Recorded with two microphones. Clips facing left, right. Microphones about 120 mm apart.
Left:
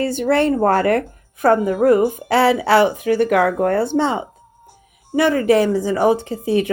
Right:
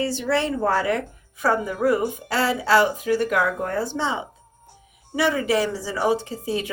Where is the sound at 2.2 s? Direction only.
65° left (ahead or behind).